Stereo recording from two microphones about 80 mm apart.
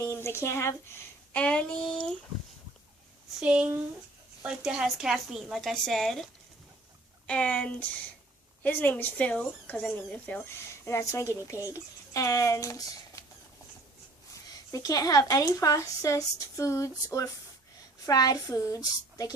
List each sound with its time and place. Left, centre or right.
0.0 s speech: left
1.3 s speech: centre
3.4 s a woman's voice: centre
7.3 s speech: centre
10.5 s a child's voice: left
14.7 s speech: left